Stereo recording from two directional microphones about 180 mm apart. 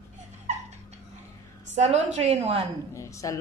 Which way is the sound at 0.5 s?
40° right (ahead or behind).